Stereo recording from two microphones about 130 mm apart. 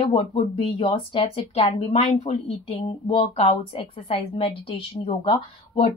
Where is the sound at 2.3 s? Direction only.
50° left (ahead or behind).